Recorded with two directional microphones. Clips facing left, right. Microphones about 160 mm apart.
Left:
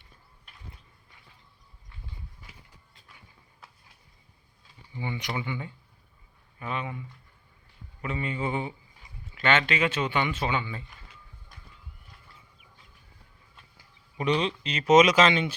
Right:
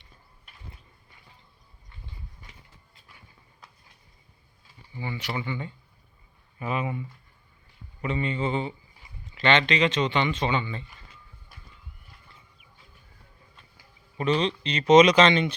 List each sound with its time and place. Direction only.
2.4 s clip-clop: 5° left (ahead or behind)
4.9 s speech: 15° left (ahead or behind)
6.6 s speech: 5° right (ahead or behind)
8.0 s speech: 5° left (ahead or behind)
11.5 s a sound: 5° right (ahead or behind)
14.3 s speech: 5° left (ahead or behind)